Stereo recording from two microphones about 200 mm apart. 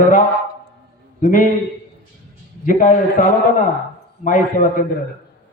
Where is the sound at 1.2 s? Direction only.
40° left (ahead or behind).